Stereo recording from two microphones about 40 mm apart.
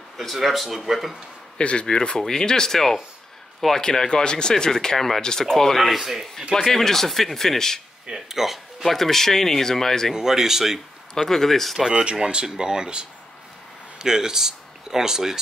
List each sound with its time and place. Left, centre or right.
0.2 s speech: centre
1.6 s speech: left; by 5.8 s centre
5.8 s speech: centre
6.5 s speech: centre
8.1 s speech: centre
8.8 s speech: centre
10.1 s speech: centre
11.1 s speech: centre
11.9 s speech: right